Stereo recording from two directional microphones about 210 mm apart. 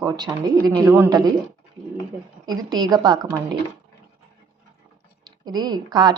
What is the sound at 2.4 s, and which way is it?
Speech, 20° right (ahead or behind).